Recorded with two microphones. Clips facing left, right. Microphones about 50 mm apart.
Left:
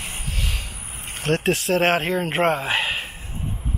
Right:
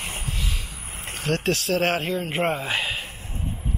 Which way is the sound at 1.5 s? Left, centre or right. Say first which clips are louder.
Left 4 dB; left.